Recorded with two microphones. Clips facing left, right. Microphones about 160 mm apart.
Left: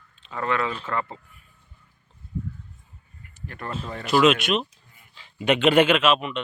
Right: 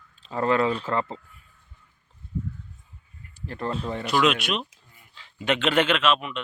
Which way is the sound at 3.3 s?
30° right (ahead or behind).